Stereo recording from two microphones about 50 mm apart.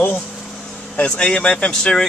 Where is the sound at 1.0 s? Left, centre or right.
Left.